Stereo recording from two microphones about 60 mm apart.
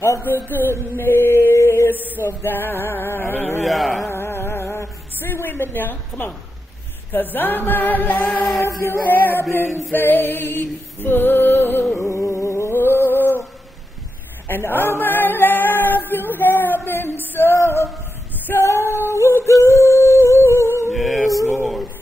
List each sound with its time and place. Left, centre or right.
0.2 s female singing: left
2.0 s female singing: left
3.6 s carnatic music: centre
4.1 s a sound: left
7.1 s female singing: left
8.6 s music: left
9.0 s female singing: left
12.0 s music: left
14.5 s female singing: left
17.3 s music: left
18.5 s singing: left
20.9 s music: centre